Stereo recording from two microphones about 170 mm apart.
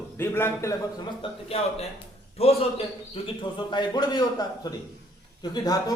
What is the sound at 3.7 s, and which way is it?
Speech, 25° left (ahead or behind).